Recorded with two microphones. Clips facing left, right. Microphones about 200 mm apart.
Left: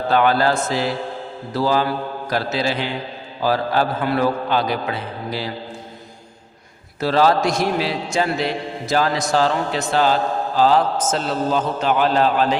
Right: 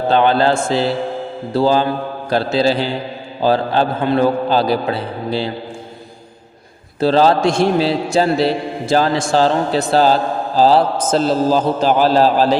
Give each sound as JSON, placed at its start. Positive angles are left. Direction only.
{"t": 0.1, "sound": "a man's voice", "side_deg": -25}
{"t": 7.0, "sound": "a man's voice", "side_deg": -30}